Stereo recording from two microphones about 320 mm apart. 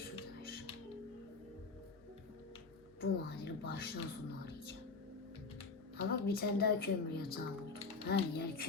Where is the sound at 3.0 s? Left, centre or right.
Left.